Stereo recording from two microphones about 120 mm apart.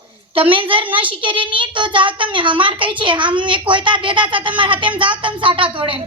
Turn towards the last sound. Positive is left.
turn(degrees=-45)  # may be behind; listen again after turning